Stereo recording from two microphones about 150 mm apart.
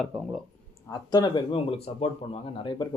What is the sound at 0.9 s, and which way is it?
Speech, 25° left (ahead or behind).